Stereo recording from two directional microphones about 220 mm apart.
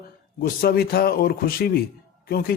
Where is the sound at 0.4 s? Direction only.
45° left (ahead or behind).